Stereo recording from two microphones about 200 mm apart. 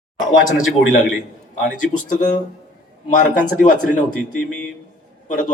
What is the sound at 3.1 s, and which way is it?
Speech, 40° left (ahead or behind).